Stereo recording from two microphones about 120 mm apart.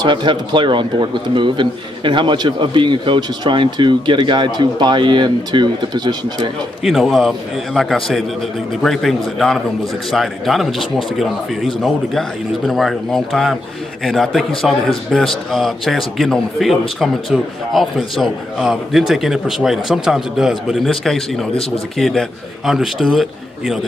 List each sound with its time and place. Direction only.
0.0 s a man's voice: 40° right (ahead or behind)
6.8 s a man's voice: centre (ahead or behind)